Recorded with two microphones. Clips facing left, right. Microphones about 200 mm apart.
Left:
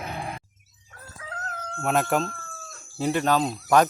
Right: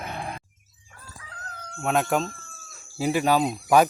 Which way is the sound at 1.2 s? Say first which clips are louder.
Left 7 dB; 65° left (ahead or behind).